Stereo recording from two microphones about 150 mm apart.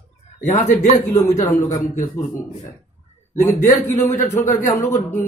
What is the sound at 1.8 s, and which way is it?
Speech, 20° left (ahead or behind).